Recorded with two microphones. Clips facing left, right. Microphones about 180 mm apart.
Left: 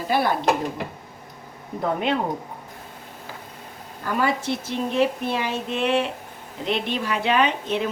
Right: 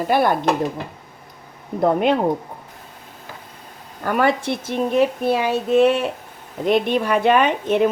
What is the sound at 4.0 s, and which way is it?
Speech, 60° right (ahead or behind).